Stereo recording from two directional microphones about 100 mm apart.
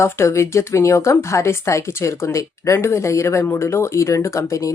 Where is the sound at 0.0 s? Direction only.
25° left (ahead or behind).